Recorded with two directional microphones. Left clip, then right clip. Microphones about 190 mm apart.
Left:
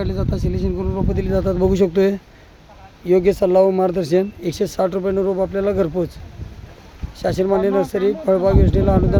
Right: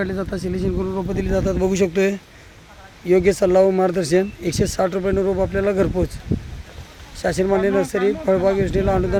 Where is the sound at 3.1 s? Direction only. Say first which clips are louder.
Left 1 dB; 5° left (ahead or behind).